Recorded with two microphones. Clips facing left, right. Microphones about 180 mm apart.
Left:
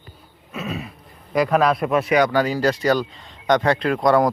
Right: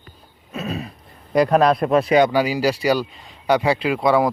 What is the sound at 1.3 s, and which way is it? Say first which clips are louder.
Speech: right 2 dB; 35° right (ahead or behind).